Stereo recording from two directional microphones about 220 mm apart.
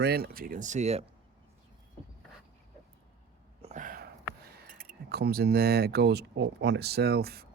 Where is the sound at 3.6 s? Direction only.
35° right (ahead or behind).